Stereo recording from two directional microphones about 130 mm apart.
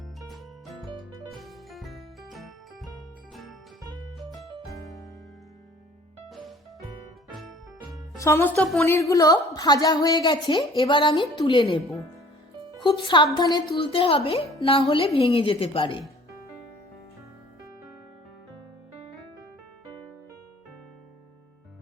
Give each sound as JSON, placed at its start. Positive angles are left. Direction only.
{"t": 0.3, "sound": "music", "side_deg": 0}
{"t": 0.9, "sound": "music", "side_deg": -35}
{"t": 1.5, "sound": "music", "side_deg": 0}
{"t": 4.6, "sound": "music", "side_deg": 0}
{"t": 6.2, "sound": "music", "side_deg": 0}
{"t": 8.2, "sound": "a woman's voice", "side_deg": 20}
{"t": 12.8, "sound": "a woman's voice", "side_deg": 40}